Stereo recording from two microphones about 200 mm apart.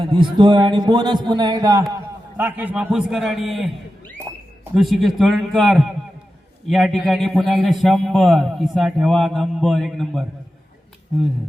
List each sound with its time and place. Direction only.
0.0 s a man's voice: 25° right (ahead or behind)
2.4 s a man's voice: 10° right (ahead or behind)